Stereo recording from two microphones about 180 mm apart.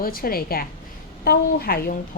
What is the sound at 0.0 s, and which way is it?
Speech, 55° left (ahead or behind).